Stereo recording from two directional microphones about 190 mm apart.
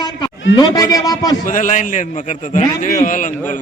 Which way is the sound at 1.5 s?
45° left (ahead or behind).